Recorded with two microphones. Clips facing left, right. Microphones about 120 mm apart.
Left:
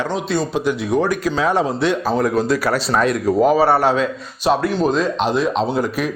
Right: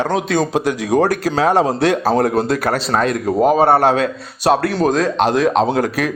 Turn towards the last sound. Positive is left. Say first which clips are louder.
# right 3 dB
turn(degrees=-85)